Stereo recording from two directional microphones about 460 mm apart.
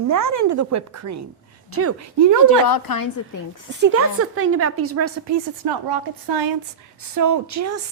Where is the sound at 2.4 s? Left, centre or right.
Left.